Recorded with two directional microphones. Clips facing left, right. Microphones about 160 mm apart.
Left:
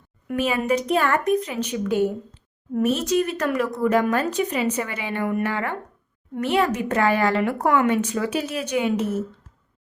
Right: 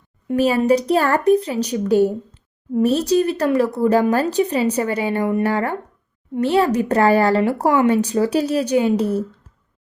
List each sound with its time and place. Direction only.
0.3 s speech: 35° right (ahead or behind)